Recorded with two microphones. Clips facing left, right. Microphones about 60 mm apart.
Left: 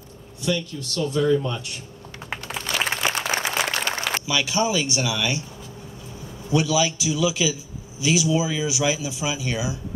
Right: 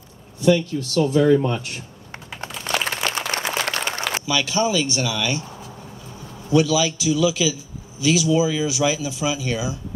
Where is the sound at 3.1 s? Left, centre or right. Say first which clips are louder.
Even; centre.